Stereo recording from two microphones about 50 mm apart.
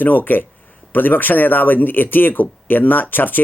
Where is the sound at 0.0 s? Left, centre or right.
Left.